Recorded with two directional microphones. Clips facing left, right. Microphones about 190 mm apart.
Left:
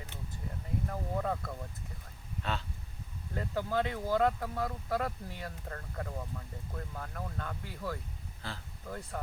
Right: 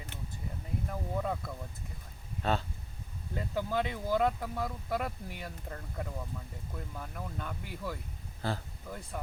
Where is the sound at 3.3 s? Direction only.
15° right (ahead or behind).